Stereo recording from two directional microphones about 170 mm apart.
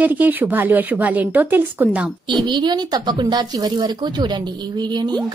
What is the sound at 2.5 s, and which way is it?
Speech, 25° right (ahead or behind).